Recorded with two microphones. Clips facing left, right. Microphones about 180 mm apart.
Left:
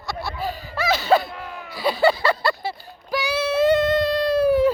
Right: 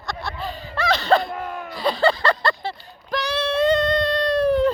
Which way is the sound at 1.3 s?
50° right (ahead or behind).